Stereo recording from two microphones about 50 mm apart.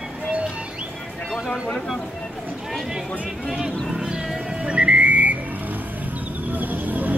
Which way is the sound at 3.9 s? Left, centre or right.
Centre.